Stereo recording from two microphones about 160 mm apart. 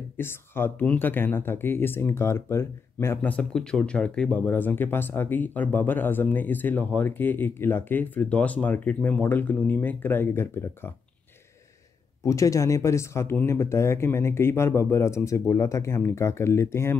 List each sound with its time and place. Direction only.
0.2 s speech: 15° left (ahead or behind)
12.3 s speech: 20° left (ahead or behind)